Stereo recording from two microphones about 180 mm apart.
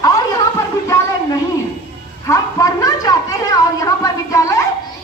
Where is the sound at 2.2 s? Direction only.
20° left (ahead or behind).